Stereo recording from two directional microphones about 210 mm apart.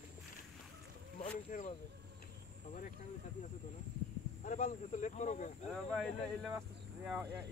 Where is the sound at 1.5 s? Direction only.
40° left (ahead or behind).